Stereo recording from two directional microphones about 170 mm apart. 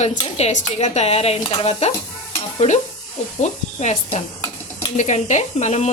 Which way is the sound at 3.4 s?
45° left (ahead or behind).